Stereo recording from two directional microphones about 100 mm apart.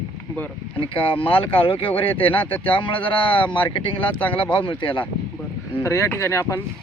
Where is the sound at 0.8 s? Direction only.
60° left (ahead or behind).